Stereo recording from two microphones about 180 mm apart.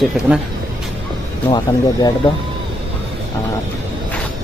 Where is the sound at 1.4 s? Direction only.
25° left (ahead or behind).